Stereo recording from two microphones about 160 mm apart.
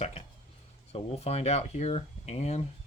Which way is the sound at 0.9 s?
40° left (ahead or behind).